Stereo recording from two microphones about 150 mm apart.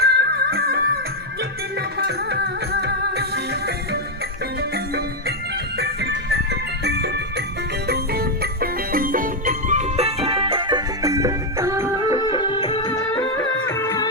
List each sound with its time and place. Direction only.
0.0 s music: 90° right
2.0 s music: 90° right
5.8 s music: 90° right; by 12.1 s 20° right (ahead or behind)
12.1 s music: 35° left (ahead or behind)